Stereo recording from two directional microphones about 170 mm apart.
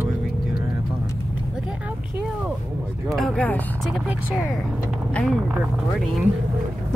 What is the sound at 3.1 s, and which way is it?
Speech, 5° left (ahead or behind).